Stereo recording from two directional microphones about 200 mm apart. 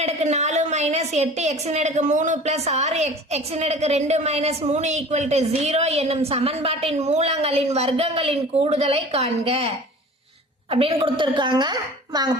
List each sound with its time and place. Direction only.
0.0 s a woman's voice: 35° right (ahead or behind)